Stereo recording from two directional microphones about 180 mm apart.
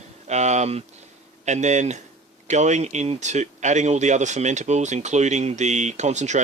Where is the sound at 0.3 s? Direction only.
40° right (ahead or behind).